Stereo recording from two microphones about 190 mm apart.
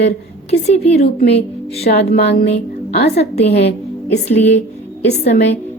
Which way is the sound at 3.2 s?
35° left (ahead or behind).